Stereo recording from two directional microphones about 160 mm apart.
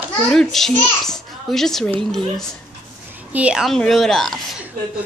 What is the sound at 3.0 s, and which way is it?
A child's voice, 10° right (ahead or behind).